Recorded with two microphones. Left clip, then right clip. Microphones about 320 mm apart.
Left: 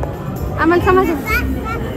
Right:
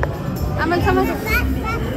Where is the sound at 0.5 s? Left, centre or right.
Centre.